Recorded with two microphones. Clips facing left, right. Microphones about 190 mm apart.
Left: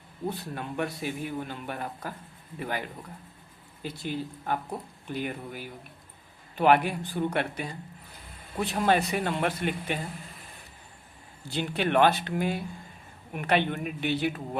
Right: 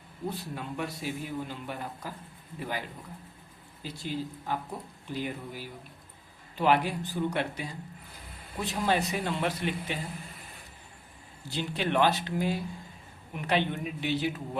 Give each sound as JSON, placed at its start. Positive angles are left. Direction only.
{"t": 0.5, "sound": "speech", "side_deg": 60}
{"t": 3.8, "sound": "speech", "side_deg": 60}
{"t": 8.7, "sound": "speech", "side_deg": 60}
{"t": 11.5, "sound": "speech", "side_deg": 60}